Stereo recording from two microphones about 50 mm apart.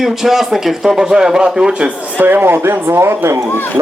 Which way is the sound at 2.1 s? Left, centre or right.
Right.